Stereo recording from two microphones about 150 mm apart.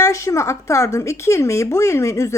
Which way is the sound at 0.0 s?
20° left (ahead or behind).